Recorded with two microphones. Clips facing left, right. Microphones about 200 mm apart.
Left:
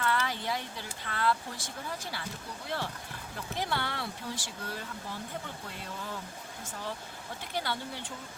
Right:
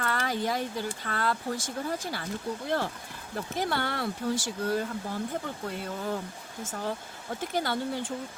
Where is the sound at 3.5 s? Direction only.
45° right (ahead or behind).